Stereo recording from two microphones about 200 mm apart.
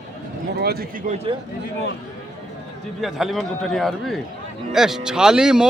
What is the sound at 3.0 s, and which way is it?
A man's voice, centre (ahead or behind).